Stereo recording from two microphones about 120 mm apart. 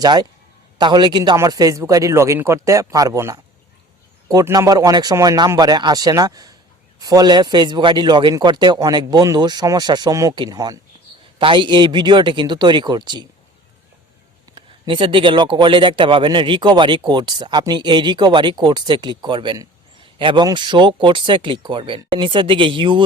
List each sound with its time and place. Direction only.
0.0 s a man's voice: 35° right (ahead or behind)
4.4 s a man's voice: 25° right (ahead or behind)
11.3 s speech: 45° right (ahead or behind)
14.5 s speech: 45° right (ahead or behind)